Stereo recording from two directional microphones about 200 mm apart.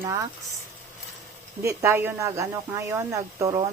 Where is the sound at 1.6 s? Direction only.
10° right (ahead or behind).